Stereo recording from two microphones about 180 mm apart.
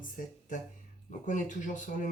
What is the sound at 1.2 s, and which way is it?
Speech, 45° left (ahead or behind).